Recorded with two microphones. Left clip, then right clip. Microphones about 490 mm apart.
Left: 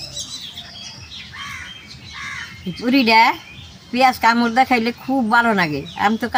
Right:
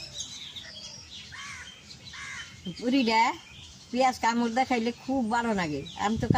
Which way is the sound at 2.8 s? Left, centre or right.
Right.